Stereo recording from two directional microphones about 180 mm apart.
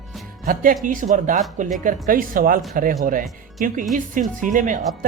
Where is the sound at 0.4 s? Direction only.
50° right (ahead or behind).